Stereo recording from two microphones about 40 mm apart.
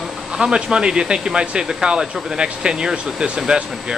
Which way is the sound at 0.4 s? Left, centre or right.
Right.